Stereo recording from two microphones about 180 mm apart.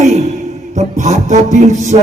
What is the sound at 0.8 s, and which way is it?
A man's voice, 40° right (ahead or behind).